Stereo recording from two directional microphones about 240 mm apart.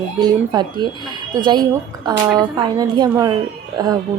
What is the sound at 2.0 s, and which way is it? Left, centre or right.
Speech, centre.